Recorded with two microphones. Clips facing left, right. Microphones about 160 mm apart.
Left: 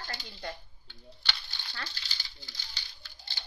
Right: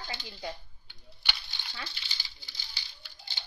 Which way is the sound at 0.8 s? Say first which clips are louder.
Left 1 dB; 15° right (ahead or behind).